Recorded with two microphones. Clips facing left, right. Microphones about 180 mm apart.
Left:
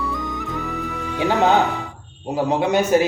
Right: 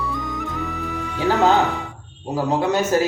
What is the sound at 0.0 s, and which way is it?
Music, centre (ahead or behind).